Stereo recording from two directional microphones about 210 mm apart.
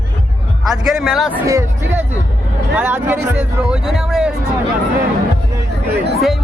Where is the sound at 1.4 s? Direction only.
15° right (ahead or behind).